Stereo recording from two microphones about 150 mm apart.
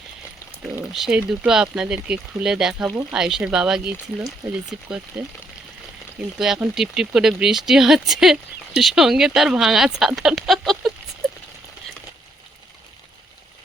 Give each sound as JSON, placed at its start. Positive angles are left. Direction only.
{"t": 0.9, "sound": "speech", "side_deg": -5}
{"t": 4.4, "sound": "speech", "side_deg": -20}
{"t": 5.2, "sound": "speech", "side_deg": -5}